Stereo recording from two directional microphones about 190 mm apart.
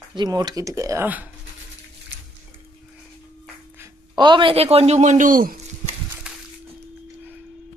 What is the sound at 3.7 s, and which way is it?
A man's voice, 20° right (ahead or behind).